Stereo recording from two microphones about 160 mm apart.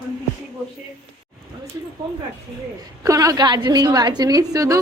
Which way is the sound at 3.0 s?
20° right (ahead or behind).